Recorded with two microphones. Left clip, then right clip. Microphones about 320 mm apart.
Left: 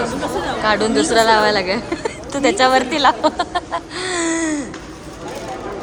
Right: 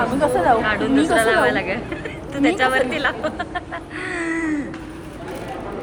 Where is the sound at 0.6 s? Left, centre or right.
Centre.